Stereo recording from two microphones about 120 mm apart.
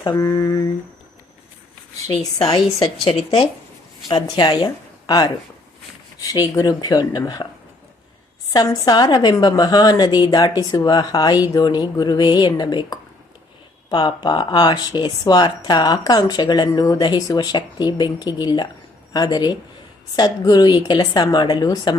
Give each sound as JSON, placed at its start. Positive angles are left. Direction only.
{"t": 0.0, "sound": "speech", "side_deg": 30}
{"t": 2.2, "sound": "speech", "side_deg": 30}
{"t": 3.0, "sound": "speech", "side_deg": 55}
{"t": 4.1, "sound": "a woman's voice", "side_deg": 40}
{"t": 8.5, "sound": "speech", "side_deg": 30}